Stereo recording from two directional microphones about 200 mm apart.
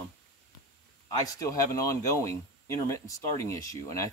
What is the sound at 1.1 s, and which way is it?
Speech, 15° left (ahead or behind).